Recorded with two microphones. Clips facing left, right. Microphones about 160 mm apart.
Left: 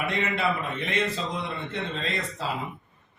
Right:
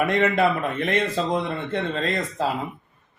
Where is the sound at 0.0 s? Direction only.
45° right (ahead or behind).